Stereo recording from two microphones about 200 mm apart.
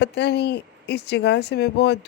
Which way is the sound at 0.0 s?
60° left (ahead or behind).